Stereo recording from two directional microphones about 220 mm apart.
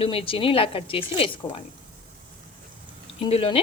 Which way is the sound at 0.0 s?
25° left (ahead or behind).